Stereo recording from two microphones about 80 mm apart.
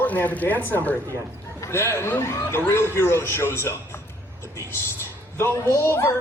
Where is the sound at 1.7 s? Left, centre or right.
Left.